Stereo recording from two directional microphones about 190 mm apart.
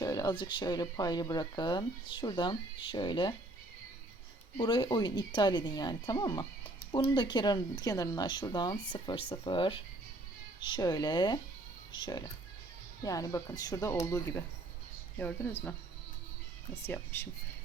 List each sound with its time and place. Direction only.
0.0 s speech: 20° left (ahead or behind)
4.5 s speech: 25° left (ahead or behind); by 15.5 s 10° left (ahead or behind)
16.8 s speech: 10° left (ahead or behind)